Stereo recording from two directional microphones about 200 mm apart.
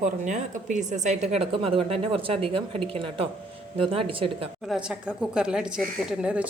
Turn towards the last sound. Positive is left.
turn(degrees=-5)  # may be behind; listen again after turning